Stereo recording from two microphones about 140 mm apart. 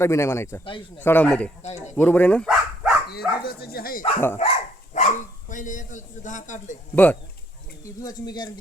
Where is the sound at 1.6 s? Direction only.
55° left (ahead or behind).